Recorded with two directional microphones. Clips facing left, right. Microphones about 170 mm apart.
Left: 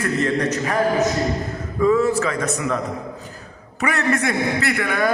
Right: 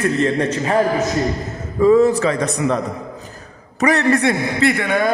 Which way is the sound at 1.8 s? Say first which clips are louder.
Right 5 dB; 35° right (ahead or behind).